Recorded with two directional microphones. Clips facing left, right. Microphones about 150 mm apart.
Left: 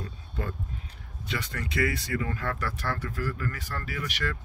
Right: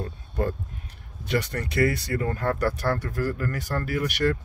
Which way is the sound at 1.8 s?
40° right (ahead or behind).